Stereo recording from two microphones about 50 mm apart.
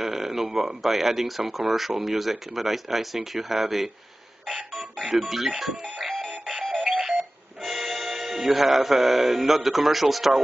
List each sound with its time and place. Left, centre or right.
0.0 s speech: centre
5.9 s music: centre